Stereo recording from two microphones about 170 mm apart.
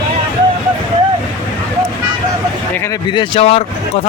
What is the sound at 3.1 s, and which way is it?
Speech, 30° left (ahead or behind).